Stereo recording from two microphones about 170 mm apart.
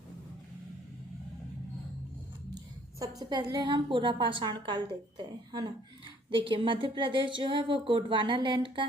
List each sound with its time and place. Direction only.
3.0 s a woman's voice: 25° right (ahead or behind)